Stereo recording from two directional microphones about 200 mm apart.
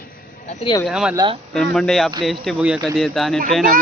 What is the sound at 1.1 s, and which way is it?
Speech, 20° right (ahead or behind).